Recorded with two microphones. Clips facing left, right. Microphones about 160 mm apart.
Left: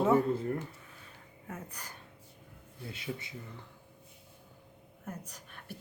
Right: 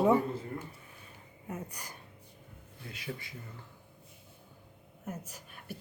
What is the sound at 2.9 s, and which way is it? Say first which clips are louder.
Speech: left 1 dB; 20° left (ahead or behind).